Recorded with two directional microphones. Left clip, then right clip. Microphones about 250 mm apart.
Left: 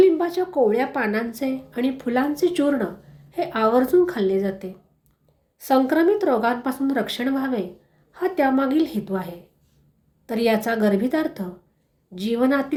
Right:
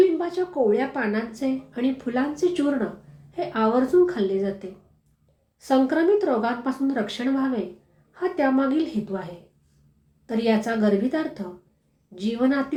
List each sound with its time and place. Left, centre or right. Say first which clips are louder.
0.0 s a woman's voice: left 3 dB; left